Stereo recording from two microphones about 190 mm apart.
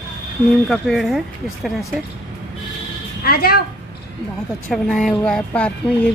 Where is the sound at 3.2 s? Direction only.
55° left (ahead or behind).